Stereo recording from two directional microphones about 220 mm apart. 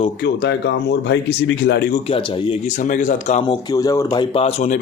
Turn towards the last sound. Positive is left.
turn(degrees=30)  # may be behind; listen again after turning